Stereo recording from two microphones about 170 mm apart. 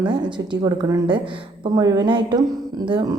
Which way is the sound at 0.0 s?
25° right (ahead or behind).